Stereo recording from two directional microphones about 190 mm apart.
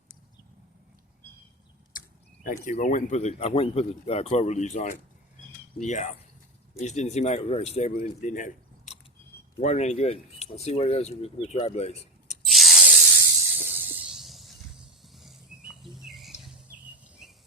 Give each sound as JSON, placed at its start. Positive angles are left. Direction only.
{"t": 1.9, "sound": "speech", "side_deg": 45}
{"t": 12.5, "sound": "spray", "side_deg": 0}
{"t": 13.6, "sound": "hiss", "side_deg": -10}
{"t": 15.1, "sound": "a sound", "side_deg": 0}
{"t": 15.8, "sound": "patter", "side_deg": 0}
{"t": 17.2, "sound": "cricket", "side_deg": -5}